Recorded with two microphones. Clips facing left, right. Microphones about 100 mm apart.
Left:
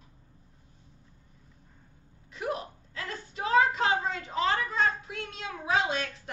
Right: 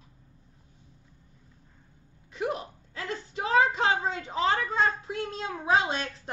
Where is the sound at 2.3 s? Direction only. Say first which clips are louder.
Right 2 dB; 25° right (ahead or behind).